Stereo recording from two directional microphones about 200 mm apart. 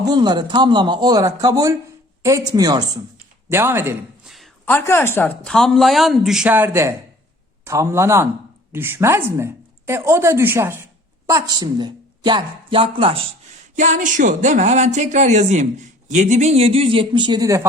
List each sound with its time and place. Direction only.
0.0 s a man's voice: 20° right (ahead or behind)
4.6 s a woman's voice: 10° left (ahead or behind); by 13.2 s 25° right (ahead or behind)
13.7 s speech: 40° right (ahead or behind); by 17.7 s 15° right (ahead or behind)